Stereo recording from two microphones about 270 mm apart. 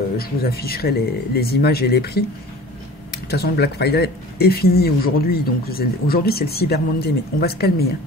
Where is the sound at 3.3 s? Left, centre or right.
Left.